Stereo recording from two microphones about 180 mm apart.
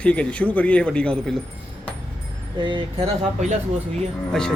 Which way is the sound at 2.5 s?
25° right (ahead or behind).